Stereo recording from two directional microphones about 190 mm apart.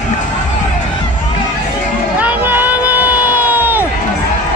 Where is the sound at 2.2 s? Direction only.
10° right (ahead or behind).